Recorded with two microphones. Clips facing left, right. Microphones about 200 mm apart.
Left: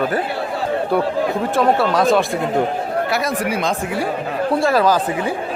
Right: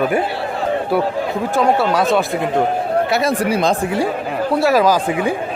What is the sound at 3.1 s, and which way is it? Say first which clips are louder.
Speech: right 3 dB; 30° right (ahead or behind).